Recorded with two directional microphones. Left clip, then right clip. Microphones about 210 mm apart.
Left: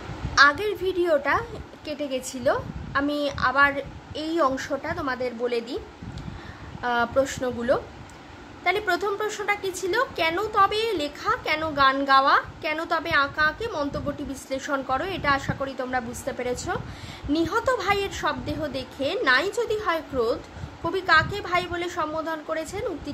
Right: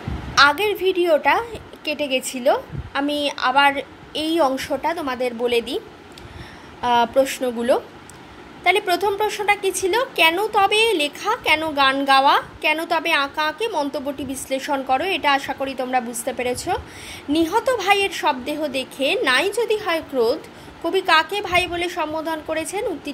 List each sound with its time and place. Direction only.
0.3 s a woman's voice: 5° right (ahead or behind)
2.0 s a woman's voice: 30° left (ahead or behind)
2.4 s a woman's voice: 5° right (ahead or behind)
6.8 s a woman's voice: 10° right (ahead or behind)